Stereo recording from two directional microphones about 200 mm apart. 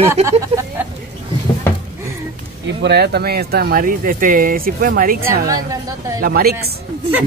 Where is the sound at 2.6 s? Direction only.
55° right (ahead or behind).